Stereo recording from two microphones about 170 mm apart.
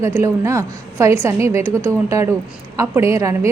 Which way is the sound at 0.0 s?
15° right (ahead or behind).